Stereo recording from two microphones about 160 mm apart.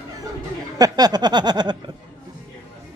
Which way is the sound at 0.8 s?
25° right (ahead or behind).